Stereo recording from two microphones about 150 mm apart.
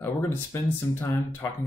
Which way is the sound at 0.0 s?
15° left (ahead or behind).